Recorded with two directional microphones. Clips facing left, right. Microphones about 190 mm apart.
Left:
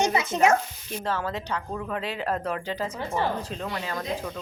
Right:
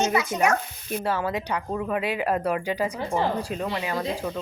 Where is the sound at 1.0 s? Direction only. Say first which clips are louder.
Right 2 dB; 10° right (ahead or behind).